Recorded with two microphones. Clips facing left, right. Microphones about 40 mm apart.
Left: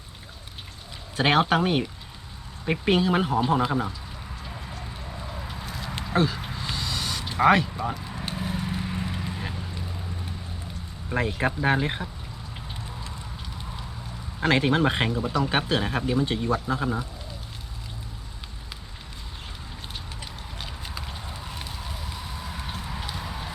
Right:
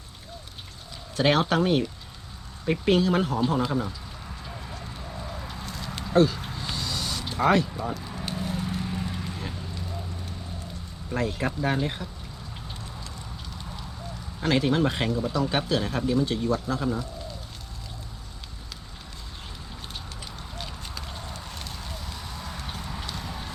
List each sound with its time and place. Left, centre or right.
1.1 s speech: centre
4.4 s a sound: centre
7.9 s vehicle: centre
11.1 s speech: left
14.4 s speech: left
20.6 s a sound: centre